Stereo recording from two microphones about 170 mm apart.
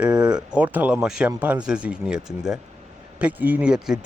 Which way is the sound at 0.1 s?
25° right (ahead or behind).